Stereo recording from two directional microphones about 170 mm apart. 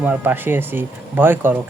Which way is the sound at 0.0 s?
10° right (ahead or behind).